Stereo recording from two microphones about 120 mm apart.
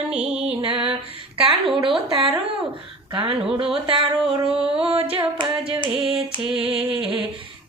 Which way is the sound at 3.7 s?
50° right (ahead or behind).